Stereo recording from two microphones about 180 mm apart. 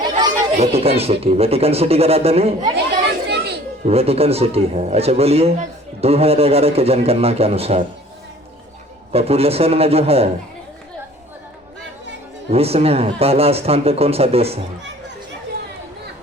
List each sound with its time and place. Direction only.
0.6 s a man's voice: 35° right (ahead or behind)
3.0 s chatter: 70° right (ahead or behind)
3.8 s a man's voice: 35° right (ahead or behind)
9.1 s a man's voice: 35° right (ahead or behind)
12.5 s a man's voice: 35° right (ahead or behind)